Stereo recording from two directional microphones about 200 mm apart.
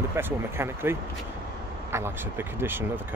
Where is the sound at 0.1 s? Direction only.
10° right (ahead or behind).